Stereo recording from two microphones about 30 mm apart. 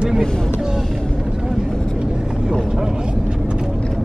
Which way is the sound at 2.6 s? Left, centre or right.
Right.